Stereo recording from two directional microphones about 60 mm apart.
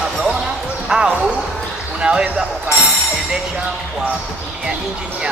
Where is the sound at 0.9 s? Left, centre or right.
Centre.